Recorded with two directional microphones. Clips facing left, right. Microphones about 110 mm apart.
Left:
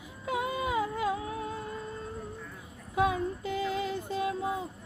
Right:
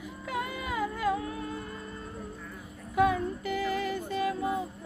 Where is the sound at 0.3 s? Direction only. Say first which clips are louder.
Left 3 dB; 20° left (ahead or behind).